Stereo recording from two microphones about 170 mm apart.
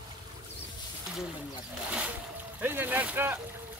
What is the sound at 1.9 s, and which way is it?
Speech, 10° right (ahead or behind).